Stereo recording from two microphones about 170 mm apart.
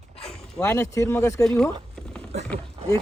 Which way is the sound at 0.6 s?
15° left (ahead or behind).